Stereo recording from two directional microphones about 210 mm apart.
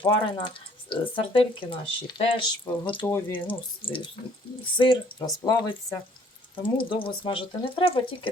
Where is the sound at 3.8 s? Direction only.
25° left (ahead or behind).